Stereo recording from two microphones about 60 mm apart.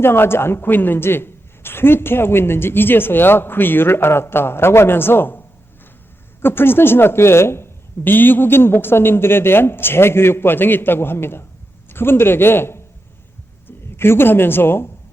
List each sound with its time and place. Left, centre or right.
0.0 s a woman's voice: left
6.4 s a woman's voice: left